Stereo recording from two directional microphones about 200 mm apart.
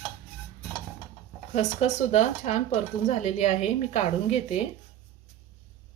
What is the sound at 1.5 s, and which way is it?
A woman's voice, 35° left (ahead or behind).